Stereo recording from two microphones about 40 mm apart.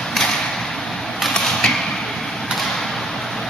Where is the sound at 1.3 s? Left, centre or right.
Centre.